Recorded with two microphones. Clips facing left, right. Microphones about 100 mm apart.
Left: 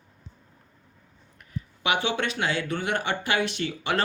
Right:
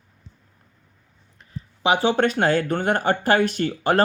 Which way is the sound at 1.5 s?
35° right (ahead or behind).